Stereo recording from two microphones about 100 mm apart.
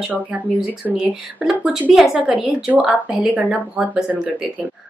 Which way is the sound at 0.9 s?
5° right (ahead or behind).